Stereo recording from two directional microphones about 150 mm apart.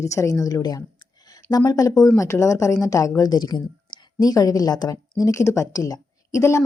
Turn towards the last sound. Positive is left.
turn(degrees=20)  # may be behind; listen again after turning